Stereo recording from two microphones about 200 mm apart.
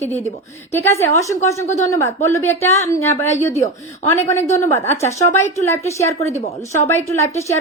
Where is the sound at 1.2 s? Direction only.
15° left (ahead or behind).